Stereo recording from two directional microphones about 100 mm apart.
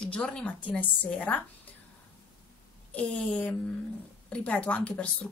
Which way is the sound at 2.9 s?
15° left (ahead or behind).